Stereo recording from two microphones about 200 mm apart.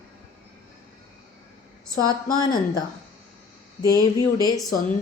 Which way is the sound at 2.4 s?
20° left (ahead or behind).